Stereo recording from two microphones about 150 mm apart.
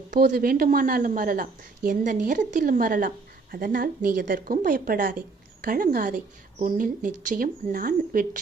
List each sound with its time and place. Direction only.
0.1 s a woman's voice: 60° right (ahead or behind)